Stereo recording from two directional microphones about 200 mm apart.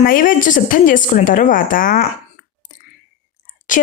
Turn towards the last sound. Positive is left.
turn(degrees=40)  # may be behind; listen again after turning